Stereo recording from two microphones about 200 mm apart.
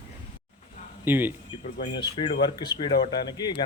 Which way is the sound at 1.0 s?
10° right (ahead or behind).